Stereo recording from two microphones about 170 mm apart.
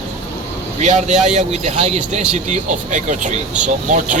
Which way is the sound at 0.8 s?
45° right (ahead or behind).